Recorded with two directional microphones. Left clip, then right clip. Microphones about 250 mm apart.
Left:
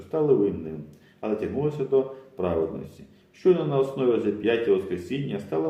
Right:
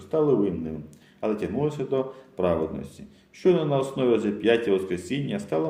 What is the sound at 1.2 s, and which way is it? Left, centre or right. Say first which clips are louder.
A man's voice: even; right.